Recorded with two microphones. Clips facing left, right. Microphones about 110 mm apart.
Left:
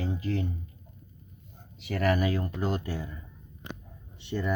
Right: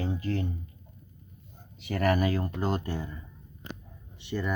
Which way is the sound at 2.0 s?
Centre (ahead or behind).